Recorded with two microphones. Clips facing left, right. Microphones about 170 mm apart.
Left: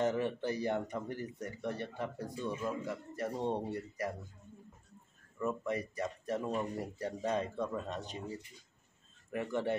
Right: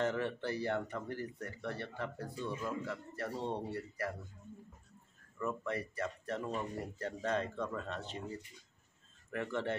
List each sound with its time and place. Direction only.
0.0 s speech: 15° left (ahead or behind)
5.4 s speech: 20° left (ahead or behind)